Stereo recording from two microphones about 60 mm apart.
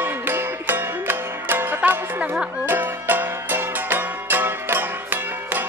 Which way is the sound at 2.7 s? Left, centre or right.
Right.